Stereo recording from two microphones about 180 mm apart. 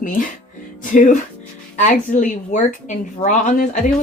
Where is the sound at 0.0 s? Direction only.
45° left (ahead or behind).